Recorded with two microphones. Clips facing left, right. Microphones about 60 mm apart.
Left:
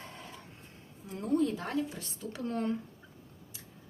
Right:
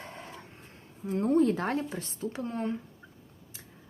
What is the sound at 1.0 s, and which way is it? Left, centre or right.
Speech, right.